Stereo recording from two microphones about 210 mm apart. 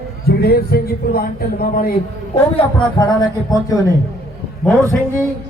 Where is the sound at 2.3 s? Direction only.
20° left (ahead or behind).